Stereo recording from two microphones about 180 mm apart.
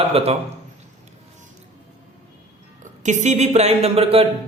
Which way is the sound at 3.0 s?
40° right (ahead or behind).